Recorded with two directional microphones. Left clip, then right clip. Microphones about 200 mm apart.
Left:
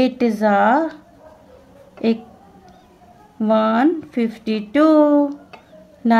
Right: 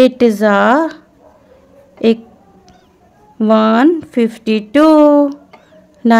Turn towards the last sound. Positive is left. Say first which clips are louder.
# right 6 dB
turn(degrees=-40)  # may be behind; listen again after turning